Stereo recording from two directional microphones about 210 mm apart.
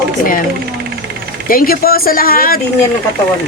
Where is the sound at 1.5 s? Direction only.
45° left (ahead or behind).